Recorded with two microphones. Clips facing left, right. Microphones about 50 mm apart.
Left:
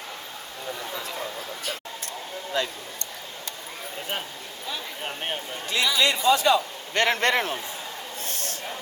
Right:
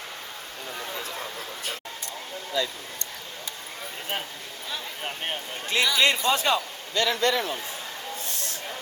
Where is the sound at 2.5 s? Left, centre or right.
Left.